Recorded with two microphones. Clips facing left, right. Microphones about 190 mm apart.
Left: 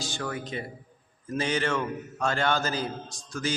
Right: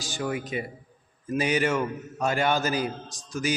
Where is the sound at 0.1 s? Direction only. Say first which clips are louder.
Right 4 dB; 15° right (ahead or behind).